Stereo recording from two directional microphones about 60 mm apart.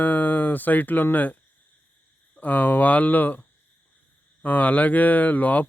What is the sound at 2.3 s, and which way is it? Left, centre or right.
Speech, left.